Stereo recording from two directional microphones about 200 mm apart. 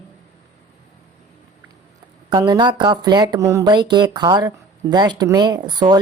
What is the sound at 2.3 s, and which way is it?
A woman's voice, 20° right (ahead or behind).